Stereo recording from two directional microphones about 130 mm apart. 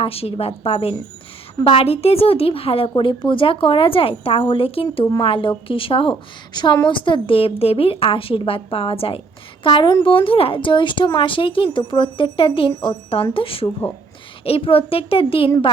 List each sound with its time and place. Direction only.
0.0 s a woman's voice: 50° left (ahead or behind)